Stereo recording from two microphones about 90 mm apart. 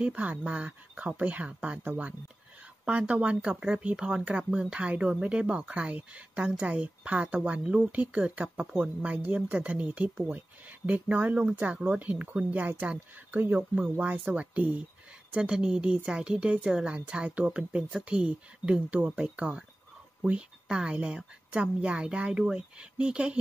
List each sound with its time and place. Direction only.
0.0 s speech: 15° right (ahead or behind)